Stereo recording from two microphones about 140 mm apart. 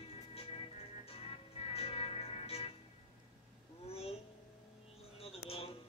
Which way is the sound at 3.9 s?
45° left (ahead or behind).